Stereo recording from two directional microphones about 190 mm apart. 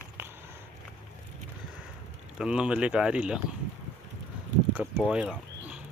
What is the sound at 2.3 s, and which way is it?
Speech, 5° right (ahead or behind).